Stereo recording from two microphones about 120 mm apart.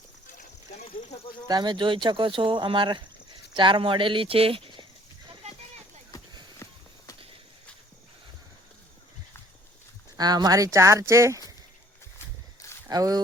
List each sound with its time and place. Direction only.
1.5 s speech: 35° right (ahead or behind)
6.1 s a sound: 30° left (ahead or behind)
6.6 s walk: 25° left (ahead or behind)
10.2 s speech: 35° right (ahead or behind)
12.9 s speech: 30° right (ahead or behind)